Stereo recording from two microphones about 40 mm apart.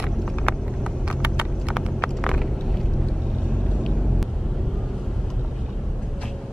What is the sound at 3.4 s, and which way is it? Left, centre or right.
Vehicle, left.